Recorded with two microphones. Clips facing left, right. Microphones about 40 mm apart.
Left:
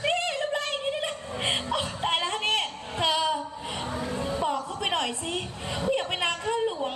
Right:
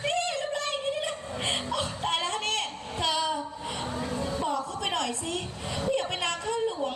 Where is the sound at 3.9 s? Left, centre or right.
Left.